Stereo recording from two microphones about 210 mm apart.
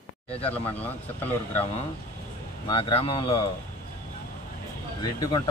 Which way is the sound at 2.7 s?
25° left (ahead or behind).